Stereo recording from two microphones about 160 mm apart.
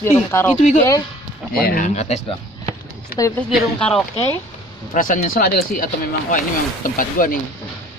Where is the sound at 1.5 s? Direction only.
70° left (ahead or behind).